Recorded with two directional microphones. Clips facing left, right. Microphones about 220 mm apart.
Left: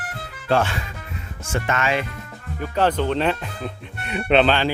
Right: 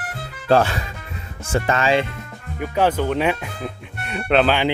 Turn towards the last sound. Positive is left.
turn(degrees=0)  # may be behind; listen again after turning